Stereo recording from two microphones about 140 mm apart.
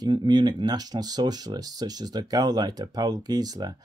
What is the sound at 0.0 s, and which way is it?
Speech, 30° right (ahead or behind).